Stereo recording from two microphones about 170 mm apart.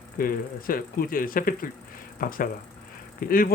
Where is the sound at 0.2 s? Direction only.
55° left (ahead or behind).